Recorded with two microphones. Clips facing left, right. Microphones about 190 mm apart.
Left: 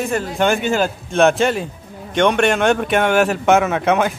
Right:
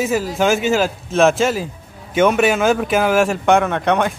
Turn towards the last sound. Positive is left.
turn(degrees=5)  # may be behind; listen again after turning